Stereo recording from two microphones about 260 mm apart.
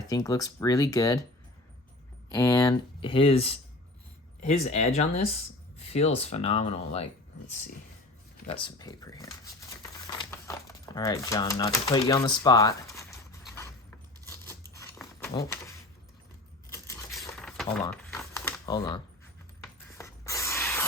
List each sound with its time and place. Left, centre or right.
0.1 s speech: centre
2.3 s speech: centre
8.4 s speech: centre
13.6 s a sound: centre
15.3 s speech: centre
16.7 s coin: centre
17.2 s a sound: centre
17.8 s speech: centre
20.0 s a sound: centre